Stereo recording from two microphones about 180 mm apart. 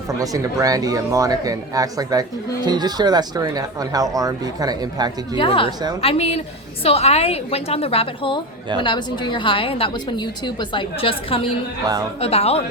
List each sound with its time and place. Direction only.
0.1 s speech: 20° right (ahead or behind)
5.4 s a woman's voice: 30° left (ahead or behind)
11.9 s speech: 20° right (ahead or behind)
12.2 s a woman's voice: 35° left (ahead or behind)